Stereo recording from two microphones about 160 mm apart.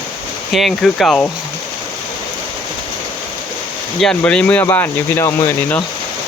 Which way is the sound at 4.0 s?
5° left (ahead or behind).